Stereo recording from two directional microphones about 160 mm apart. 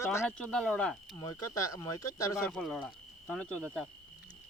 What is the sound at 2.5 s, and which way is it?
Speech, centre (ahead or behind).